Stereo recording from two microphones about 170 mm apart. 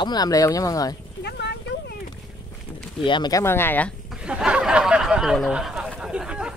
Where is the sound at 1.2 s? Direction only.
80° left.